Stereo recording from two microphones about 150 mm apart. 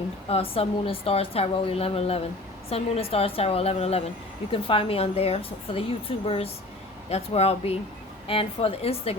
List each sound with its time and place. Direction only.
0.3 s a woman's voice: 40° left (ahead or behind)